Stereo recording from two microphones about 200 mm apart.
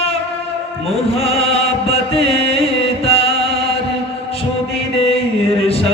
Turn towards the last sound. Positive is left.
turn(degrees=30)  # may be behind; listen again after turning